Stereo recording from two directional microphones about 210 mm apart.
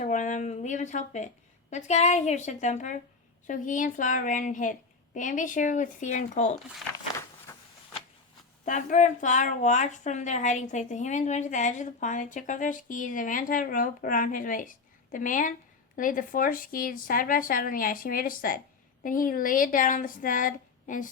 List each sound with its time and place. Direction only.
0.0 s a woman's voice: 35° left (ahead or behind)
7.5 s a sound: 10° left (ahead or behind)
8.6 s a woman's voice: 35° left (ahead or behind)